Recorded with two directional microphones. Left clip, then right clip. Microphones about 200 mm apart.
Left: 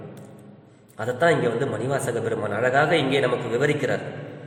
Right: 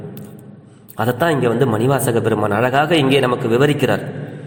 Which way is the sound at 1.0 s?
30° right (ahead or behind).